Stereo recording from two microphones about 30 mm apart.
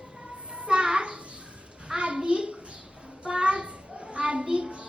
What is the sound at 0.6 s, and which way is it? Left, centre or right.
Speech, right.